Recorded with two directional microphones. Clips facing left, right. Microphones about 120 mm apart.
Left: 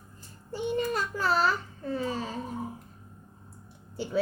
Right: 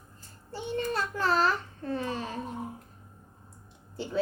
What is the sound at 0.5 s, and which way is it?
A child's voice, 10° left (ahead or behind).